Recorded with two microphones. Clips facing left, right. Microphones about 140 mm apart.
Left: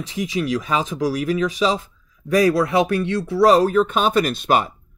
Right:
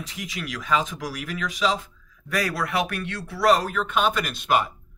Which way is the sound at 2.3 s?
20° left (ahead or behind).